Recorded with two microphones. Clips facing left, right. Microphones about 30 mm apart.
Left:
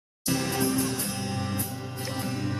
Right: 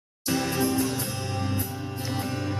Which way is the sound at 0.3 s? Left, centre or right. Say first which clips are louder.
Right 1 dB; centre.